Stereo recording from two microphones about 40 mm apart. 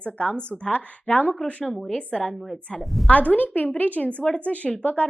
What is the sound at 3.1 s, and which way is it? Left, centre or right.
A woman's voice, left.